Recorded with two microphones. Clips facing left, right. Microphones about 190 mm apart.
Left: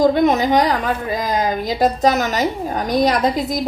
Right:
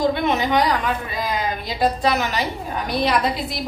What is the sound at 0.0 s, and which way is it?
A woman's voice, 40° left (ahead or behind).